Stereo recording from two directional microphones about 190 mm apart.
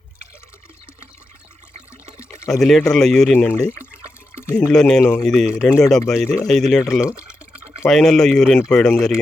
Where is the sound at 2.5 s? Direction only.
Centre (ahead or behind).